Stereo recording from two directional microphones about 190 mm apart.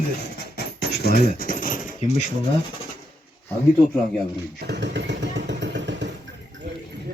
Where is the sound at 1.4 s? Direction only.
45° left (ahead or behind).